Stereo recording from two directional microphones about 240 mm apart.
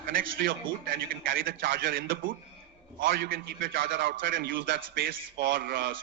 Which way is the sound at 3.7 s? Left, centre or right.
Right.